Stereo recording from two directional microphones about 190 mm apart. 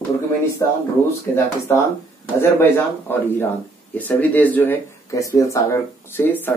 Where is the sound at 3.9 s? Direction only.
10° left (ahead or behind).